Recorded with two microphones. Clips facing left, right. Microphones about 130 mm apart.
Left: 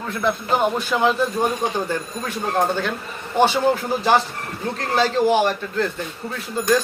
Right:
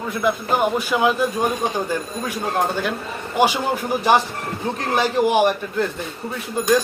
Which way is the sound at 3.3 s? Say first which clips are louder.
Left 1 dB; 10° right (ahead or behind).